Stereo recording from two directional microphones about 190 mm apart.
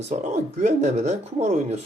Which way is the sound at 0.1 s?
35° right (ahead or behind).